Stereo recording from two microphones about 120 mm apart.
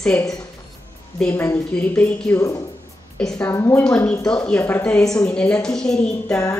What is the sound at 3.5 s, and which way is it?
Speech, 20° left (ahead or behind).